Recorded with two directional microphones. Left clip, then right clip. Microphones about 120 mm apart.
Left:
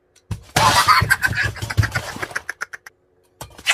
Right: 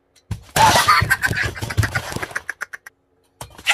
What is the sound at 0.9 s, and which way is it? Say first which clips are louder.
Scratching: even; 25° left (ahead or behind).